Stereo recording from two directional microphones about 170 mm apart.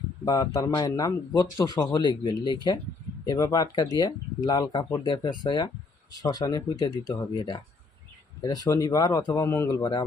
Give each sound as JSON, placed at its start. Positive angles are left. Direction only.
{"t": 0.3, "sound": "speech", "side_deg": 20}